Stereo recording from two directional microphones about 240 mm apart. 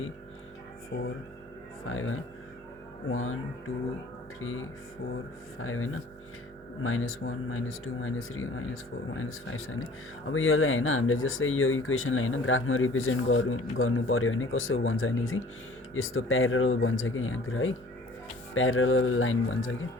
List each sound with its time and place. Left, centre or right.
0.9 s speech: left
4.4 s speech: left